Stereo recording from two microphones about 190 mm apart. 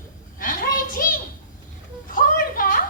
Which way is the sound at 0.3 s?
45° left (ahead or behind).